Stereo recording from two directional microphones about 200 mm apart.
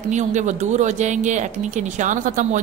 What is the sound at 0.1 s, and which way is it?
A woman's voice, 35° right (ahead or behind).